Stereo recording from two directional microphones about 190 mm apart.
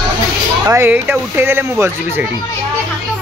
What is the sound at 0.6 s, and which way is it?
Speech, 15° right (ahead or behind).